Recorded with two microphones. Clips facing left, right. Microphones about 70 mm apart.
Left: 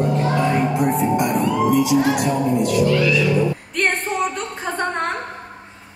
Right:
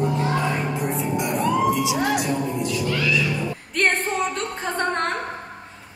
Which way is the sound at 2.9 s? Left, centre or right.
Centre.